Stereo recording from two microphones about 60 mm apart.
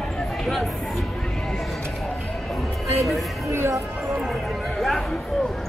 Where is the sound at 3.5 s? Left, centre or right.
Right.